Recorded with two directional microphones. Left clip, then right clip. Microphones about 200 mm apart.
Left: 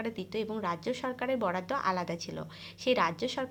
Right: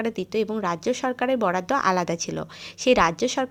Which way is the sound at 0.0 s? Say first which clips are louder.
Right 10 dB; 40° right (ahead or behind).